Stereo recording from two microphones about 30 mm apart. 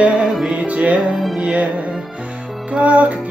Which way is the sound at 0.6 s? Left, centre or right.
Right.